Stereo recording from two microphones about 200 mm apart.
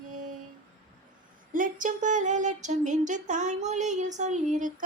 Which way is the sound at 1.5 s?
40° right (ahead or behind).